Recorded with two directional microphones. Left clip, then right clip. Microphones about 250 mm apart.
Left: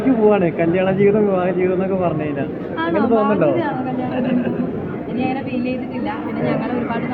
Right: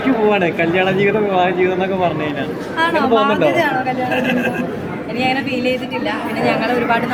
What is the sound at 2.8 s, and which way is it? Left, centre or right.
Speech, right.